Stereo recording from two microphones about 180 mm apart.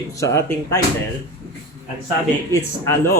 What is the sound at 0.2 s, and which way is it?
Speech, 15° left (ahead or behind).